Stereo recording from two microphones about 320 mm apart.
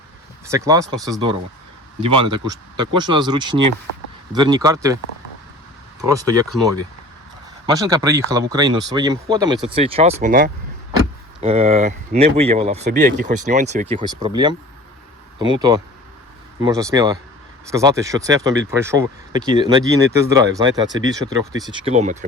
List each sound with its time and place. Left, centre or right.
0.4 s speech: centre
6.0 s speech: centre
7.7 s speech: centre